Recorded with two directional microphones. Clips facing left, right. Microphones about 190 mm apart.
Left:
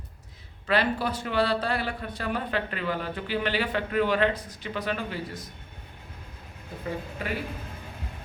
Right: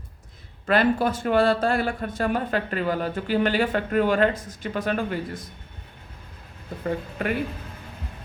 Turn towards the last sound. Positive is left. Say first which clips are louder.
# right 6 dB
turn(degrees=-60)  # may be behind; listen again after turning